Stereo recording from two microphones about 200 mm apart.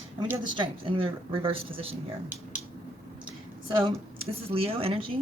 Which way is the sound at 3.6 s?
25° right (ahead or behind).